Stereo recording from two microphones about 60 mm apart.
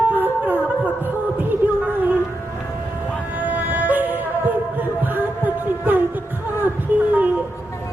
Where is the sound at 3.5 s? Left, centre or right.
Right.